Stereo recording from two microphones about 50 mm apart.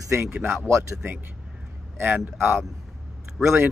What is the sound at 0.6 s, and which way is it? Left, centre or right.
Speech, right.